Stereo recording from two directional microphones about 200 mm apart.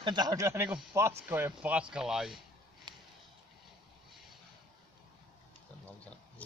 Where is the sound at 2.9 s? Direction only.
20° right (ahead or behind).